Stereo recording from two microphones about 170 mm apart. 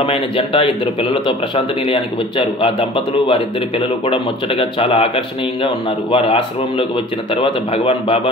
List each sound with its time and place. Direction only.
0.0 s a man's voice: 30° left (ahead or behind)